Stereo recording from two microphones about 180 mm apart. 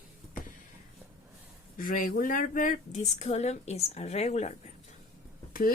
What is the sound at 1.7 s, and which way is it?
Speech, 50° left (ahead or behind).